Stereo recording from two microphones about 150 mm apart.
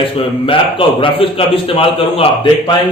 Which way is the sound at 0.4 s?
35° left (ahead or behind).